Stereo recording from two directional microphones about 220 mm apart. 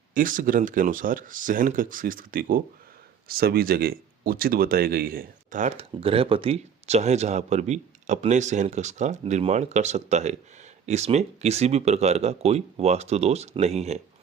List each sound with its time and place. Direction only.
0.1 s speech: 40° right (ahead or behind)